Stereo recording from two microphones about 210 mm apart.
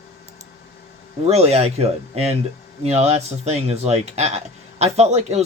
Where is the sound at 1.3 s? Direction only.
30° right (ahead or behind).